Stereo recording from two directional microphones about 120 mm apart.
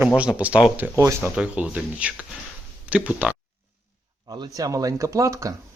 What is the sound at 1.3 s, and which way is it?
Speech, 10° right (ahead or behind).